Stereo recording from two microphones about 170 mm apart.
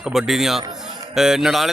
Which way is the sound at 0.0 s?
Centre (ahead or behind).